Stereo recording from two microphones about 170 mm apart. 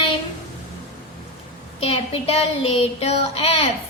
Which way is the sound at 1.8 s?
35° left (ahead or behind).